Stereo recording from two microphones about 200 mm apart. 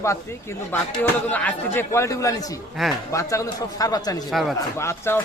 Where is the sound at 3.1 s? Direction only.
15° left (ahead or behind).